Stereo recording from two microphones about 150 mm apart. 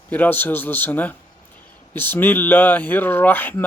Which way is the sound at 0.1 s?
10° left (ahead or behind).